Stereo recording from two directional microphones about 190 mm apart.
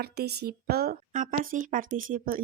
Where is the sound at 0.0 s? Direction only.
60° right (ahead or behind).